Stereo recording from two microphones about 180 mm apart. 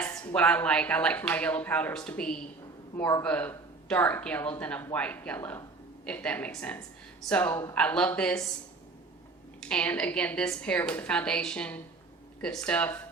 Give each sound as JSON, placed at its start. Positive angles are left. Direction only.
{"t": 0.0, "sound": "a sound", "side_deg": 20}
{"t": 0.3, "sound": "a woman's voice", "side_deg": 5}
{"t": 9.6, "sound": "a woman's voice", "side_deg": 5}